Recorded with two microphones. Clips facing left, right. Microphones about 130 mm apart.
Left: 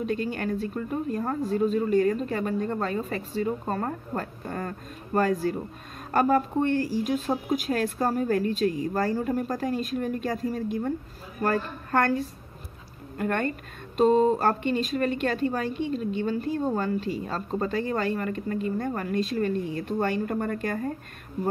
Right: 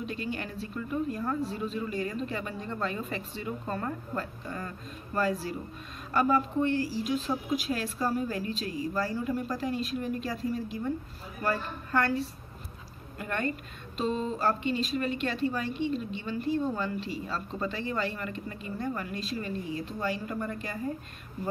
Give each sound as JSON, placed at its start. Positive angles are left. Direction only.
{"t": 0.0, "sound": "speech", "side_deg": 45}